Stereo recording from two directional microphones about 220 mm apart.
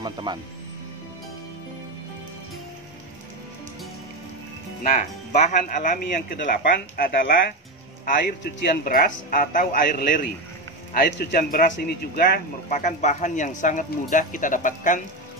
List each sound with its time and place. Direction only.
0.0 s speech: 20° right (ahead or behind)
4.9 s speech: 35° left (ahead or behind)